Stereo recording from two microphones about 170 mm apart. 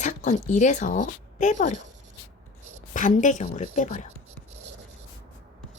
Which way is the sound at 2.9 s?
45° left (ahead or behind).